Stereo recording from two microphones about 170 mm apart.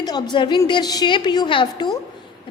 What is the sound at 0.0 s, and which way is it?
A woman's voice, 25° left (ahead or behind).